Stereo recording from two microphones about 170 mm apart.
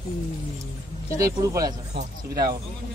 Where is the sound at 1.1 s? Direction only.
20° right (ahead or behind).